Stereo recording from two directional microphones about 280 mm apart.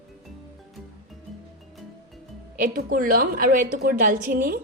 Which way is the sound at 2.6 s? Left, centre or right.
Right.